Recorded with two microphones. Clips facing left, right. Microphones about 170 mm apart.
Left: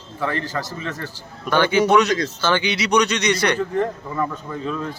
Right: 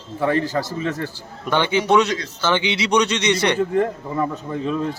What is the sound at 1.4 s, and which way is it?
A man's voice, 20° right (ahead or behind).